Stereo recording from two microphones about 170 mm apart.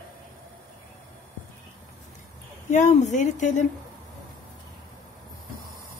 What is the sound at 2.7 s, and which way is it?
Speech, 45° left (ahead or behind).